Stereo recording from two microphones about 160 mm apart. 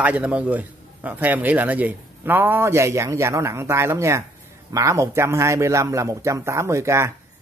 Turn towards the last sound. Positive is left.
turn(degrees=-15)  # may be behind; listen again after turning